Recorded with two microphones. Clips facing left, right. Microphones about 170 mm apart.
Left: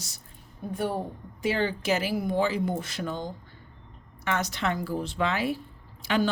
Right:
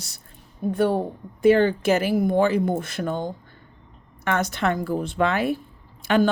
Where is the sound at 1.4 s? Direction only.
55° right (ahead or behind).